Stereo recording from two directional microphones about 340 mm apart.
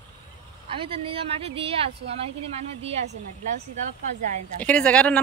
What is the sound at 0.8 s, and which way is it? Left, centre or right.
Speech, centre.